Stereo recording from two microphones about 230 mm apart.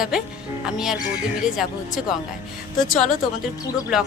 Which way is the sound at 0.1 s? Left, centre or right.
Centre.